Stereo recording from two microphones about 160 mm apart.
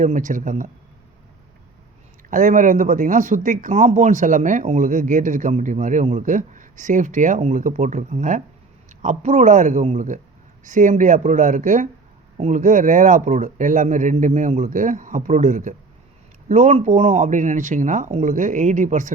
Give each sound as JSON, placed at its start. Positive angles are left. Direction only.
{"t": 0.0, "sound": "speech", "side_deg": -55}
{"t": 2.3, "sound": "speech", "side_deg": -55}